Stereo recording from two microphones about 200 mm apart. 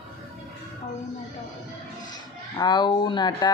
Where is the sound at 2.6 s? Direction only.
20° left (ahead or behind).